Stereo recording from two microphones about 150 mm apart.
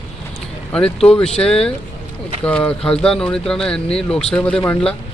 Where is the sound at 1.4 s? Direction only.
40° left (ahead or behind).